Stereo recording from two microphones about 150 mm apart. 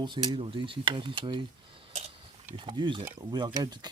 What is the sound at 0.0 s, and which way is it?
Speech, 30° right (ahead or behind).